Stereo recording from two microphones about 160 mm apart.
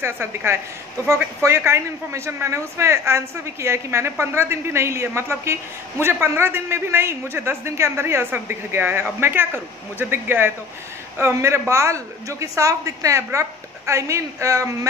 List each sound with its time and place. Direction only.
0.0 s a woman's voice: 15° right (ahead or behind)